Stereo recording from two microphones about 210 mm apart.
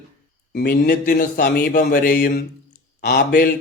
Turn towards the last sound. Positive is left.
turn(degrees=45)  # may be behind; listen again after turning